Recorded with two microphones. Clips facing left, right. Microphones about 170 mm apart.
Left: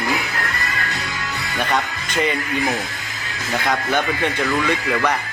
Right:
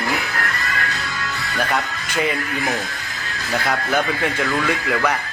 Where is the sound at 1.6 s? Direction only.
Centre (ahead or behind).